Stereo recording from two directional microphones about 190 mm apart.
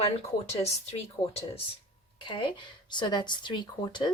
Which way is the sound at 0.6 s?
30° left (ahead or behind).